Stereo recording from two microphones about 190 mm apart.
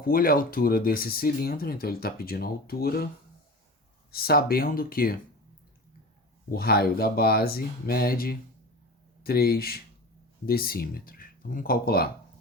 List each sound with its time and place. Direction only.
0.0 s speech: 50° left (ahead or behind)
4.1 s speech: 55° left (ahead or behind)
6.5 s speech: 55° left (ahead or behind)